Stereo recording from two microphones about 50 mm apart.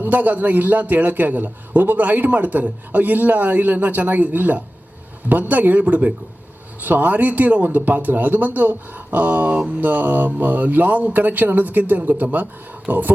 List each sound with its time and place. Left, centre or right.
0.0 s a man's voice: right